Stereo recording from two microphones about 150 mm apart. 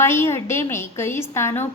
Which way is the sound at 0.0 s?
15° left (ahead or behind).